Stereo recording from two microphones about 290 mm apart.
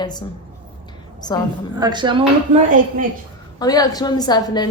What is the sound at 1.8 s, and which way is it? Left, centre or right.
Speech, centre.